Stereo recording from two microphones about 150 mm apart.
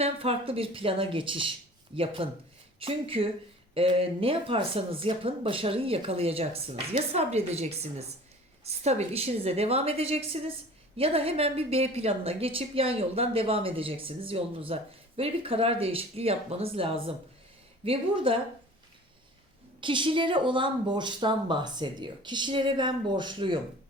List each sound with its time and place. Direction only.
0.0 s a woman's voice: 40° right (ahead or behind)
19.8 s a woman's voice: 35° right (ahead or behind)